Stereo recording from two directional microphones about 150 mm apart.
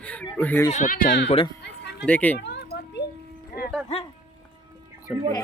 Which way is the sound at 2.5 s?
90° left.